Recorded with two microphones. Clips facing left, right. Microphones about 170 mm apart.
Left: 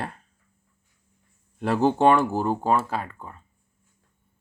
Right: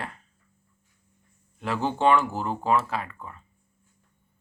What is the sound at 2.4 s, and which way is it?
Speech, 40° left (ahead or behind).